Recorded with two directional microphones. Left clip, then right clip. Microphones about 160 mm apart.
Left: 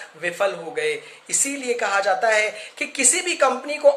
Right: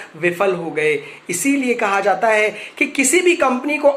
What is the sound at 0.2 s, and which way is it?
Speech, 30° left (ahead or behind).